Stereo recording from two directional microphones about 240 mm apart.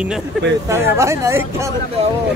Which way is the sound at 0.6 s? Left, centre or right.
Centre.